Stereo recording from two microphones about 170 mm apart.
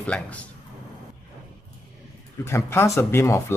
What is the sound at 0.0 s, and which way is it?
Speech, 5° left (ahead or behind).